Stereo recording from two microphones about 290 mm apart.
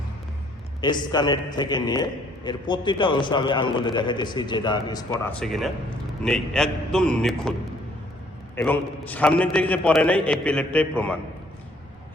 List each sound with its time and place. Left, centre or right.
0.8 s a man's voice: centre
8.5 s a man's voice: centre